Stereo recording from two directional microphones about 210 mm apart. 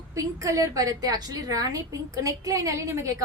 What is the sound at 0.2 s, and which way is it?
A woman's voice, 15° right (ahead or behind).